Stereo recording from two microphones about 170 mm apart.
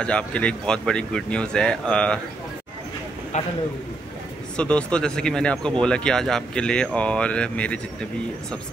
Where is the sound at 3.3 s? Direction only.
45° left (ahead or behind).